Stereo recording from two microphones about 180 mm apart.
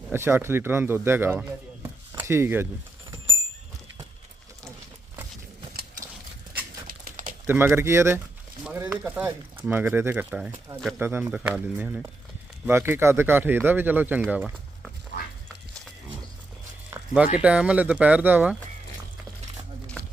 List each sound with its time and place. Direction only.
0.1 s speech: 15° right (ahead or behind)
6.8 s crumpling: 50° right (ahead or behind)
7.4 s speech: 10° right (ahead or behind)
17.3 s speech: 5° right (ahead or behind)